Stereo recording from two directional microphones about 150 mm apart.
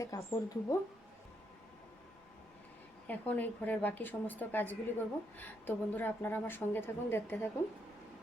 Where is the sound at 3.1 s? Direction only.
10° left (ahead or behind).